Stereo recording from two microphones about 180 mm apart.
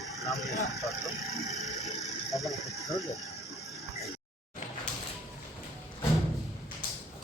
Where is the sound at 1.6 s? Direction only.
Centre (ahead or behind).